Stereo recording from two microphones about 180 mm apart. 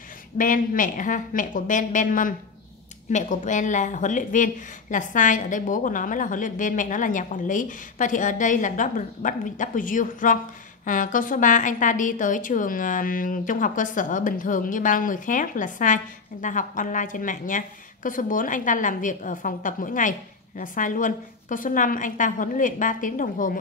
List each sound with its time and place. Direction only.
0.4 s a woman's voice: 50° left (ahead or behind)